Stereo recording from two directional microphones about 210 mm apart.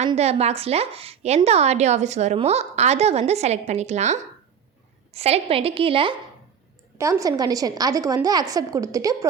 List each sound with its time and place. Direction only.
0.0 s a woman's voice: 30° right (ahead or behind)
7.0 s a woman's voice: 15° right (ahead or behind)